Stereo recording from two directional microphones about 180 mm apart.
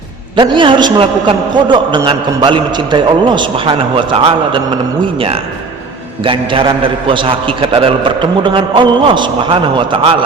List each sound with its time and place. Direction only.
0.3 s a man's voice: 25° right (ahead or behind)
6.2 s a man's voice: 30° right (ahead or behind)